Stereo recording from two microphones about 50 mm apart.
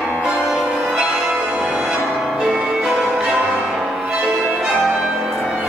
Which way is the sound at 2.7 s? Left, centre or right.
Centre.